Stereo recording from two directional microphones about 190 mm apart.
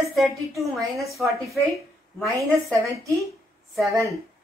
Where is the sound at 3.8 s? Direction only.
15° right (ahead or behind).